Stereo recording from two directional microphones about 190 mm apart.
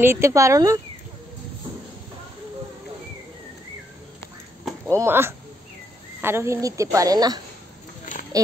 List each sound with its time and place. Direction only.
0.0 s a woman's voice: 15° right (ahead or behind)
4.8 s a woman's voice: 15° right (ahead or behind)